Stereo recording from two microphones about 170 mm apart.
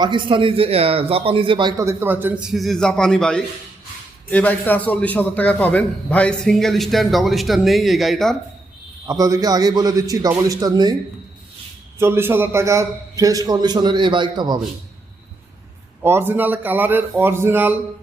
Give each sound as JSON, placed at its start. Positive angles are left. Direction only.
{"t": 0.0, "sound": "a man's voice", "side_deg": -30}
{"t": 9.0, "sound": "a man's voice", "side_deg": -20}
{"t": 11.9, "sound": "a man's voice", "side_deg": -15}
{"t": 16.0, "sound": "a man's voice", "side_deg": -15}